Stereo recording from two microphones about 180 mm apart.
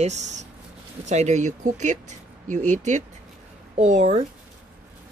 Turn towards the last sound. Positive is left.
turn(degrees=-40)  # may be behind; listen again after turning